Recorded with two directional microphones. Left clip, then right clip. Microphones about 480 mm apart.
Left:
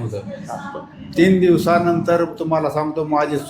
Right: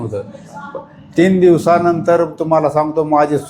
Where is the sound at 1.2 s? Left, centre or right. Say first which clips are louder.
Right 4 dB; centre.